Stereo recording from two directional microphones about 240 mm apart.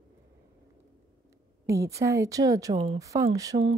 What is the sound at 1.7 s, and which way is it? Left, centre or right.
A woman's voice, centre.